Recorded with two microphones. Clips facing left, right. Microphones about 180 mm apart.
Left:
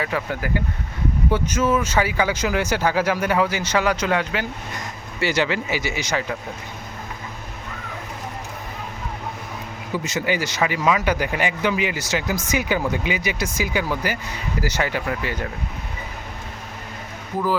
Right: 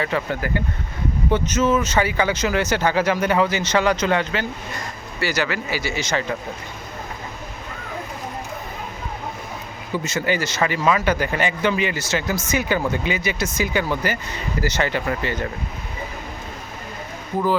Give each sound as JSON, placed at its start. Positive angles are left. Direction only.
{"t": 0.0, "sound": "speech", "side_deg": 5}
{"t": 5.2, "sound": "speech", "side_deg": 25}
{"t": 9.9, "sound": "speech", "side_deg": 15}